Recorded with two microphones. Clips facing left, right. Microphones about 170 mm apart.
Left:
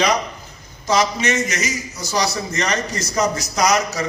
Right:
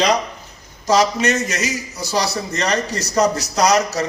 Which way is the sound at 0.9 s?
40° right (ahead or behind).